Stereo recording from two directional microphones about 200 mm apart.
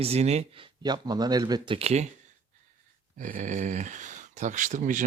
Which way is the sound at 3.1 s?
40° right (ahead or behind).